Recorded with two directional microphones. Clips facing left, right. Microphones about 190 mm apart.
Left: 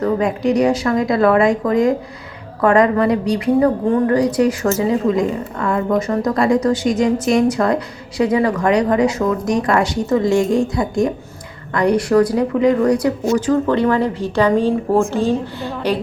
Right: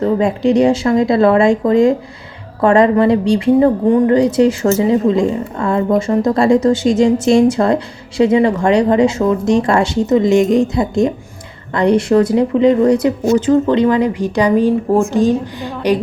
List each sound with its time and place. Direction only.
0.0 s a woman's voice: 25° right (ahead or behind)